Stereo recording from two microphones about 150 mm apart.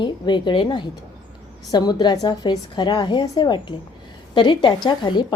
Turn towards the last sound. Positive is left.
turn(degrees=30)  # may be behind; listen again after turning